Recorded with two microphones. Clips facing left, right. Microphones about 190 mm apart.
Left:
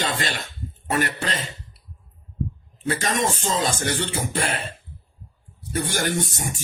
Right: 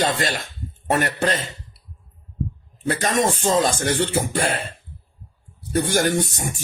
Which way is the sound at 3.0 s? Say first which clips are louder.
Right 5 dB; 45° right (ahead or behind).